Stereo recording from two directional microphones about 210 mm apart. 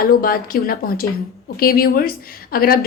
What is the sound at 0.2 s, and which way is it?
A woman's voice, 45° left (ahead or behind).